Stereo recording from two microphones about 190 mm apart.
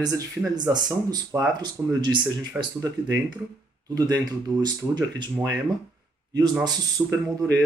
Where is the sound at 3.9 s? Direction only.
20° right (ahead or behind).